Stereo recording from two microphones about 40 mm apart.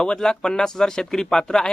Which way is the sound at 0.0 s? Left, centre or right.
Centre.